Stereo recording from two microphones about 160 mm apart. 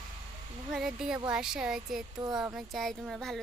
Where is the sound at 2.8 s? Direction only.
Centre (ahead or behind).